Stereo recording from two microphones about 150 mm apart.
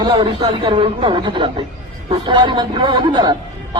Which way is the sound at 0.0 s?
30° right (ahead or behind).